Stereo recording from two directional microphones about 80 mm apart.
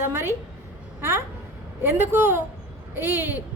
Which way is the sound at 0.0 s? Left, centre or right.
Right.